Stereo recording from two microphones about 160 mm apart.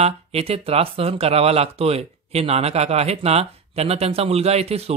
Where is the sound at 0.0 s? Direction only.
40° right (ahead or behind).